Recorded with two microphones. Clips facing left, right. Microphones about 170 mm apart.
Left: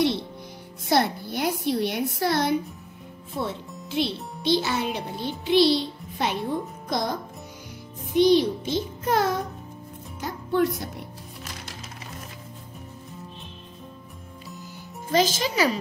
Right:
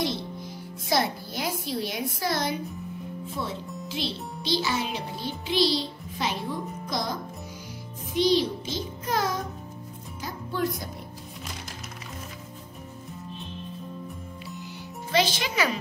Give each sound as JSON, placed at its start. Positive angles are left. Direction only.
{"t": 0.8, "sound": "a woman's voice", "side_deg": 60}
{"t": 8.1, "sound": "a child's voice", "side_deg": 60}
{"t": 10.2, "sound": "music", "side_deg": 65}
{"t": 15.0, "sound": "a child's voice", "side_deg": 40}